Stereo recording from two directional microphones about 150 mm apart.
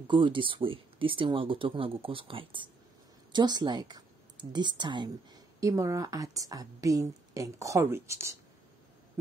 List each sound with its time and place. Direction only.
0.0 s speech: 35° right (ahead or behind); by 8.4 s 20° right (ahead or behind)